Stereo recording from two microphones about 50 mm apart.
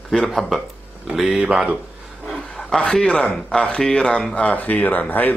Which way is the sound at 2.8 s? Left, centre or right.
Centre.